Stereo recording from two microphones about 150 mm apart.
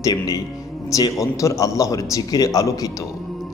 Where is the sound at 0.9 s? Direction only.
20° left (ahead or behind).